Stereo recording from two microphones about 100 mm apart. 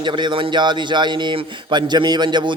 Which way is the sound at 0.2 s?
50° right (ahead or behind).